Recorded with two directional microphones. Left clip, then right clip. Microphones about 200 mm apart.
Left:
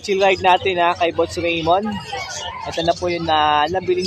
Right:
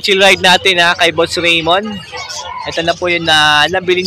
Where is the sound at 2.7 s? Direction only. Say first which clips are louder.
Right 6 dB; centre (ahead or behind).